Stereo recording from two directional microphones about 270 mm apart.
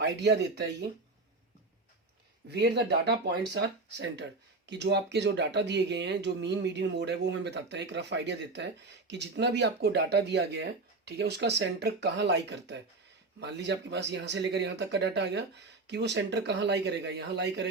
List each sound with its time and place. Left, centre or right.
0.0 s speech: right
2.5 s speech: right